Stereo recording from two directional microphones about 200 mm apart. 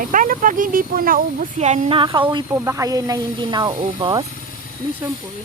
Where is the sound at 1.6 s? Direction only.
35° right (ahead or behind).